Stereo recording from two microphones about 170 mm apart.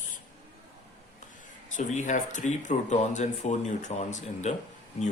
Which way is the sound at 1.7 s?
45° left (ahead or behind).